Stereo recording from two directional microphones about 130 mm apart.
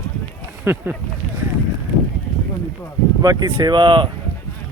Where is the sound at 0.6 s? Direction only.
15° right (ahead or behind).